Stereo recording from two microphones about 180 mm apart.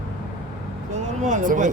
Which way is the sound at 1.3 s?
45° right (ahead or behind).